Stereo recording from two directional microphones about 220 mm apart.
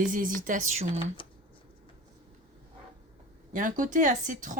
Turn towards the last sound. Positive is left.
turn(degrees=-35)  # may be behind; listen again after turning